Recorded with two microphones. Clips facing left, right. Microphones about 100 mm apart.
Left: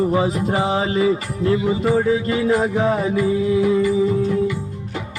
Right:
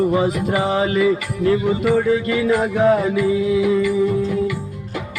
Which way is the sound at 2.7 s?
Centre (ahead or behind).